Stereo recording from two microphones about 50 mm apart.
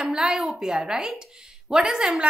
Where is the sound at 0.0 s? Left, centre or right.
Centre.